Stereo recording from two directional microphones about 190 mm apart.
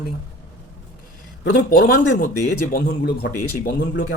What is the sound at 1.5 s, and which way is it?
Speech, 65° left (ahead or behind).